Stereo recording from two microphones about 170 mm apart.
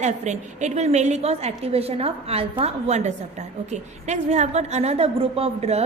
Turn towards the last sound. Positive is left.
turn(degrees=-40)  # may be behind; listen again after turning